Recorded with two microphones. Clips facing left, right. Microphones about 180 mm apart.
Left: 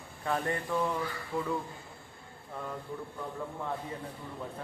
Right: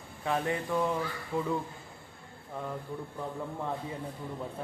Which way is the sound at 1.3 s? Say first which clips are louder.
Right 2 dB; 15° right (ahead or behind).